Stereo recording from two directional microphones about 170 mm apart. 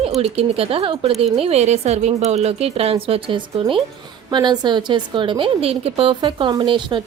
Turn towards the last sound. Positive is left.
turn(degrees=-30)  # may be behind; listen again after turning